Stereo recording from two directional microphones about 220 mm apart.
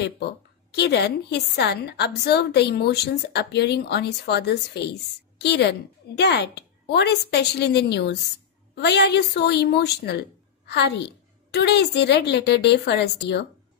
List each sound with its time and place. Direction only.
0.0 s a woman's voice: 50° left (ahead or behind)